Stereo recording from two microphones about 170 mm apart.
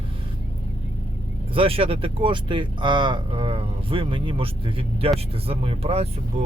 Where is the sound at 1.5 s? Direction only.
35° right (ahead or behind).